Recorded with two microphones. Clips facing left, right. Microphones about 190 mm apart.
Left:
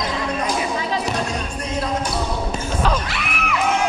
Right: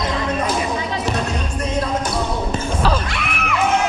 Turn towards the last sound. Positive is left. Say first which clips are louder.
# right 2 dB
turn(degrees=0)  # may be behind; listen again after turning